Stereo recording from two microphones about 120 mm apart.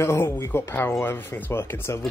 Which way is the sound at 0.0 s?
20° left (ahead or behind).